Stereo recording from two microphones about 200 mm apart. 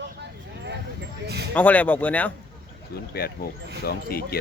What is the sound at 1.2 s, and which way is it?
Speech, 55° right (ahead or behind).